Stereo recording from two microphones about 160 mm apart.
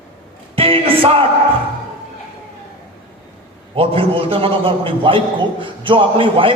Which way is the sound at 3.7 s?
35° right (ahead or behind).